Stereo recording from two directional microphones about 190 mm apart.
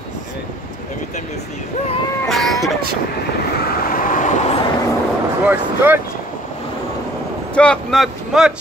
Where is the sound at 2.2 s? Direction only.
Centre (ahead or behind).